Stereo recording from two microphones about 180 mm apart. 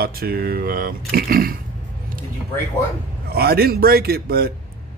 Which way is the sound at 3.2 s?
60° right (ahead or behind).